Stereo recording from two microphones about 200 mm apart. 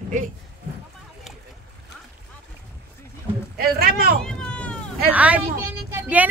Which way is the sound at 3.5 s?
50° right (ahead or behind).